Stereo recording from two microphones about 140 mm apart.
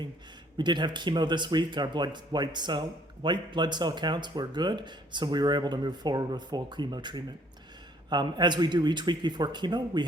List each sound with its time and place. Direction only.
0.5 s speech: 30° right (ahead or behind)